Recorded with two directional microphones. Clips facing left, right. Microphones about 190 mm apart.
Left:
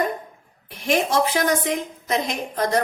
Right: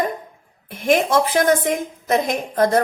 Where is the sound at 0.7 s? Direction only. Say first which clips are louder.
Right 4 dB; 50° right (ahead or behind).